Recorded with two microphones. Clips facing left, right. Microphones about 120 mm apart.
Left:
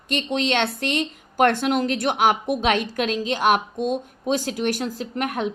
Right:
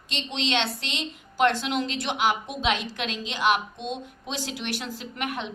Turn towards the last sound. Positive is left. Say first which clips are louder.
# left 6 dB
turn(degrees=45)  # may be behind; listen again after turning